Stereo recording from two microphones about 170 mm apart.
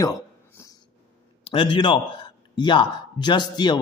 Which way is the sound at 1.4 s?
30° left (ahead or behind).